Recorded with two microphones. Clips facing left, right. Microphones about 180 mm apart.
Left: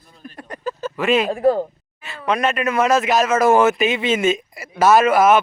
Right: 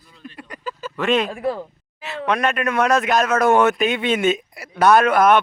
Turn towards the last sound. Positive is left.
turn(degrees=5)  # may be behind; listen again after turning